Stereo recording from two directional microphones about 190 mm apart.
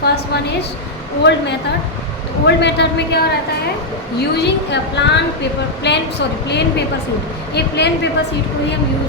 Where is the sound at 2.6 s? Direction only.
65° left (ahead or behind).